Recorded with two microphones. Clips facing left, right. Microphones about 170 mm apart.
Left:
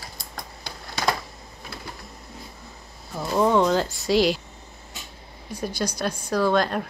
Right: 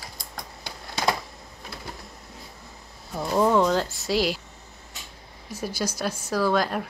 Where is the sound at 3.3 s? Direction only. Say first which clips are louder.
Left 1 dB; 5° right (ahead or behind).